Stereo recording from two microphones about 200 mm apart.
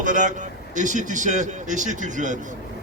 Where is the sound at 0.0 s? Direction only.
40° right (ahead or behind).